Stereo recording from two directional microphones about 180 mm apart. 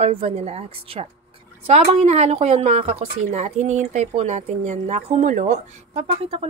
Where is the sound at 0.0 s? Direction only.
35° right (ahead or behind).